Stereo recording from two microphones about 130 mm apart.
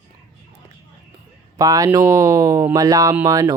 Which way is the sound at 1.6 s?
25° right (ahead or behind).